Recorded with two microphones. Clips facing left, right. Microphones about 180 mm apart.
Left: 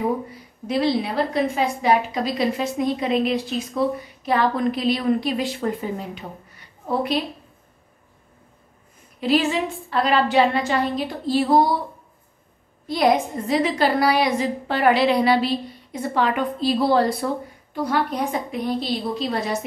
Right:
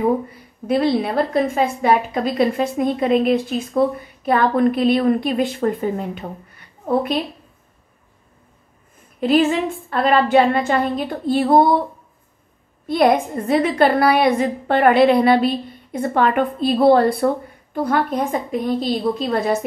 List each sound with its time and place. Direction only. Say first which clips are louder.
0.7 s a woman's voice: right 4 dB; 55° right (ahead or behind)
9.2 s a woman's voice: right 4 dB; 50° right (ahead or behind)
12.8 s a woman's voice: right 3 dB; 55° right (ahead or behind)